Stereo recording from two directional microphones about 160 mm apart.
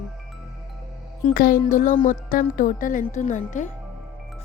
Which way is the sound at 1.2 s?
60° left (ahead or behind).